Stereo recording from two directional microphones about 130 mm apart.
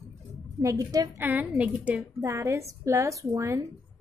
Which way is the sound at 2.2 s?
20° right (ahead or behind).